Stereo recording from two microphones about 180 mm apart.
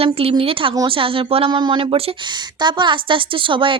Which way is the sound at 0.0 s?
30° right (ahead or behind).